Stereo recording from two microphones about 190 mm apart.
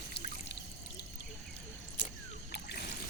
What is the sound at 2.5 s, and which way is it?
Trickle, 60° left (ahead or behind).